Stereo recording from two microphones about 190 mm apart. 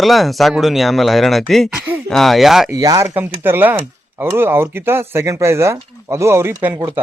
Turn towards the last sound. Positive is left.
turn(degrees=-15)  # may be behind; listen again after turning